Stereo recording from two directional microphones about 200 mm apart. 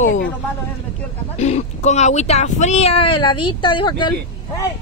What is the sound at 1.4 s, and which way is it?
A woman's voice, 35° left (ahead or behind).